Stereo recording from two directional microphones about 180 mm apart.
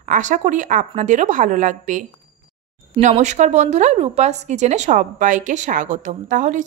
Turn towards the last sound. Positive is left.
turn(degrees=-45)  # may be behind; listen again after turning